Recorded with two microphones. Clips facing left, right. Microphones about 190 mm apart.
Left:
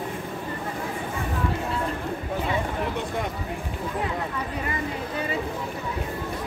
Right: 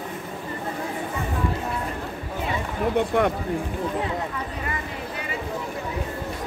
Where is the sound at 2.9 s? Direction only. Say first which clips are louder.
Right 8 dB; 65° right (ahead or behind).